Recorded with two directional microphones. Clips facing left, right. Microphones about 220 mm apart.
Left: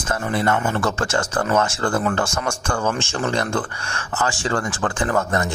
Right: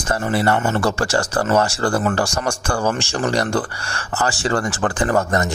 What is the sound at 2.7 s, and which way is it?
Speech, 35° right (ahead or behind).